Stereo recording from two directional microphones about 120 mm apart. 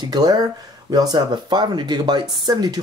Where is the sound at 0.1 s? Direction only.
35° right (ahead or behind).